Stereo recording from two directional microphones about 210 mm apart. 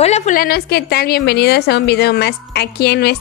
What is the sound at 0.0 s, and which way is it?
A woman's voice, 30° left (ahead or behind).